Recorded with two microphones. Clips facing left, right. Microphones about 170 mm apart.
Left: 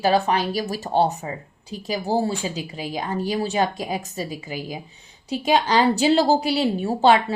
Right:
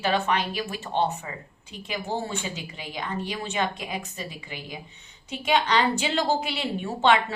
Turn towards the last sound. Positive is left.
turn(degrees=35)  # may be behind; listen again after turning